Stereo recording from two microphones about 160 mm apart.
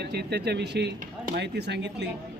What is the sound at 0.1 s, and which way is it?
A man's voice, 90° right.